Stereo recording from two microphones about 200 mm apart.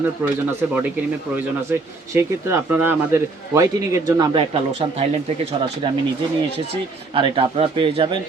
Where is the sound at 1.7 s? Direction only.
10° right (ahead or behind); by 5.0 s 25° right (ahead or behind).